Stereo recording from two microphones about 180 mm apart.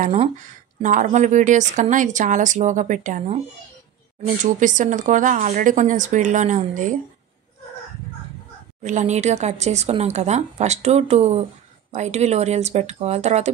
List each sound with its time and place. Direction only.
0.8 s speech: 45° right (ahead or behind)
4.4 s speech: 45° right (ahead or behind)
8.8 s speech: 40° right (ahead or behind)